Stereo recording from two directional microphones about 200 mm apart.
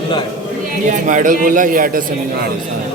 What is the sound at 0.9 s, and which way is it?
A man's voice, 40° right (ahead or behind).